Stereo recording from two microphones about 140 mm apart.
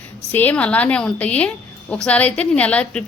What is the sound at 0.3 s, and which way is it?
A woman's voice, 10° left (ahead or behind).